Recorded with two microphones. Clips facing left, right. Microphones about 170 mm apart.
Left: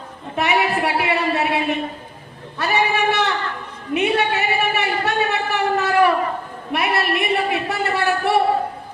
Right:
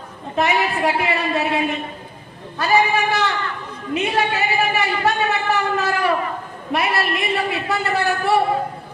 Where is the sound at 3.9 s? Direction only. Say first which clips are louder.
Left 2 dB; 65° left (ahead or behind).